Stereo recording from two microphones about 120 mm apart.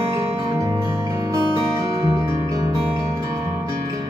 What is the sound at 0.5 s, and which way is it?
Music, 25° right (ahead or behind).